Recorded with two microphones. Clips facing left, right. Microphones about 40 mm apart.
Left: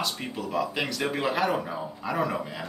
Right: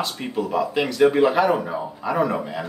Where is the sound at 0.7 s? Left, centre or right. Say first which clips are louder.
Right 11 dB; centre.